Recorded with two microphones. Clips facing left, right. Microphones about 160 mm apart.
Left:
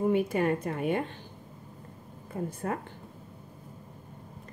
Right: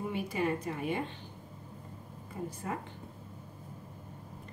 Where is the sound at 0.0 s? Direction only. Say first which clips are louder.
Left 7 dB; 55° left (ahead or behind).